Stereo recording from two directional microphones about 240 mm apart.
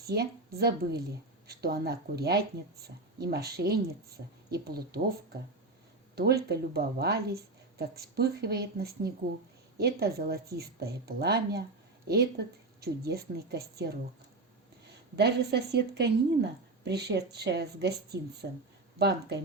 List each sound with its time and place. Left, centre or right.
0.0 s a woman's voice: right
15.1 s a woman's voice: right